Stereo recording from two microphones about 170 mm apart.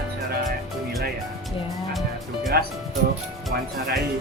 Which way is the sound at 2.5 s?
70° right (ahead or behind).